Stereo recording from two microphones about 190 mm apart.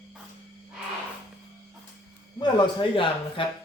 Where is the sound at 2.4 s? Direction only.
25° left (ahead or behind).